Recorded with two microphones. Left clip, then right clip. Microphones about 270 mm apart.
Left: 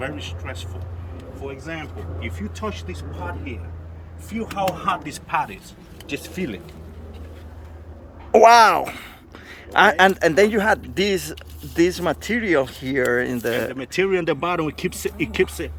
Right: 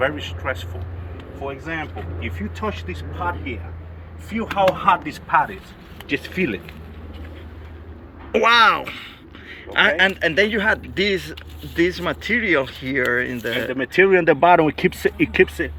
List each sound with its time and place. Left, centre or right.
0.4 s speech: centre
4.3 s speech: centre
8.3 s a man's voice: centre
13.8 s speech: centre